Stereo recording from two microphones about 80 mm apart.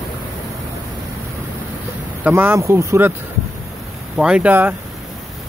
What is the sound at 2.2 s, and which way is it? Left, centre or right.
Speech, right.